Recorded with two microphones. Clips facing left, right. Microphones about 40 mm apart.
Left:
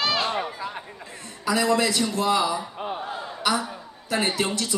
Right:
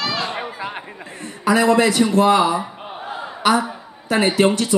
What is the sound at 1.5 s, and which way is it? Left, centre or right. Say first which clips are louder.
Speech: right 7 dB; right.